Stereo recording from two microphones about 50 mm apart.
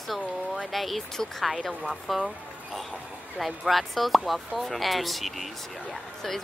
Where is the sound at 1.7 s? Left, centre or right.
Right.